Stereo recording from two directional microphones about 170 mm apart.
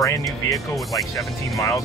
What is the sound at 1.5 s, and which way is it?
Speech, 20° left (ahead or behind).